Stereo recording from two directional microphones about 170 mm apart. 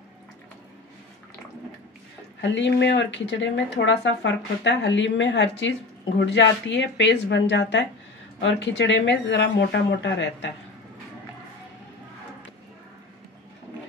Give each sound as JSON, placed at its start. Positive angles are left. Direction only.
{"t": 2.4, "sound": "speech", "side_deg": 90}